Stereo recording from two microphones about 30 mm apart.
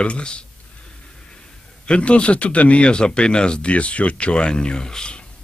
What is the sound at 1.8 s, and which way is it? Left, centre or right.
Speech, left.